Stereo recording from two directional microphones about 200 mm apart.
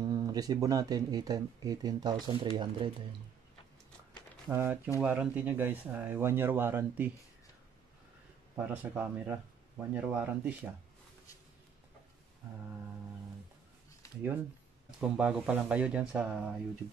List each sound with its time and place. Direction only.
0.0 s speech: 20° right (ahead or behind)
4.5 s speech: 10° right (ahead or behind)
8.5 s speech: 10° right (ahead or behind)
14.0 s a sound: 15° left (ahead or behind)
15.0 s speech: 5° right (ahead or behind)